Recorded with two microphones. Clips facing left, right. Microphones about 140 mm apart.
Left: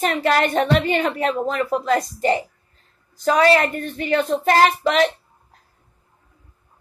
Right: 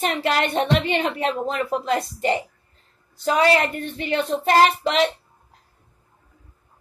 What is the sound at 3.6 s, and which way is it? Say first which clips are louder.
Speech: left 2 dB; 40° left (ahead or behind).